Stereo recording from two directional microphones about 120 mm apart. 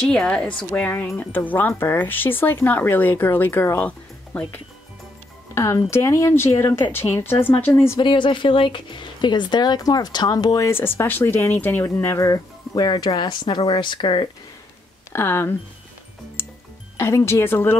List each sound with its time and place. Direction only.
0.0 s a woman's voice: 5° left (ahead or behind)
8.0 s speech: 40° left (ahead or behind); by 12.3 s 20° left (ahead or behind)
12.3 s speech: 30° left (ahead or behind)
15.1 s a woman's voice: 20° left (ahead or behind)
16.4 s music: 20° left (ahead or behind)
16.9 s a woman's voice: 20° left (ahead or behind)